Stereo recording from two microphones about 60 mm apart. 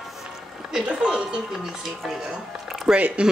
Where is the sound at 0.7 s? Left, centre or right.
Centre.